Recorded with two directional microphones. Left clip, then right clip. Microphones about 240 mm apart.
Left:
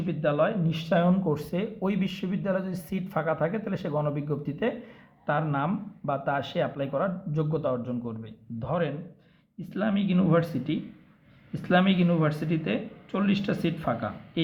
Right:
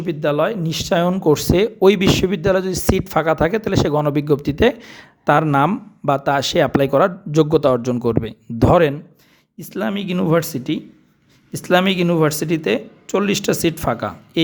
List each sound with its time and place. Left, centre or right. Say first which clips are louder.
0.0 s speech: right 7 dB; right